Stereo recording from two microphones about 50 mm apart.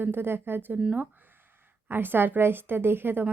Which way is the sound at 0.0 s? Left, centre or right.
Right.